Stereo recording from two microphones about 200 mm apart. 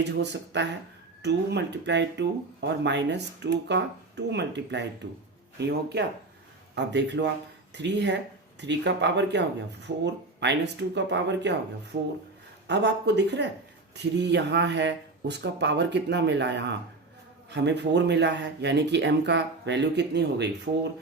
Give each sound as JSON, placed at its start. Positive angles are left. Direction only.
{"t": 0.0, "sound": "speech", "side_deg": -60}